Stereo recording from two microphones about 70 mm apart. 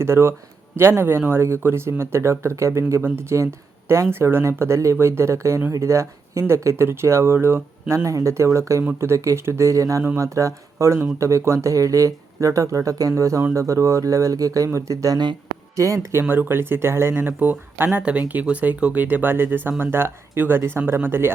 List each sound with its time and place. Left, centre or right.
0.0 s speech: right
16.3 s speech: right